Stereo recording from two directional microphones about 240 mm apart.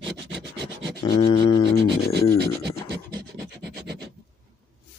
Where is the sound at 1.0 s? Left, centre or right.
Centre.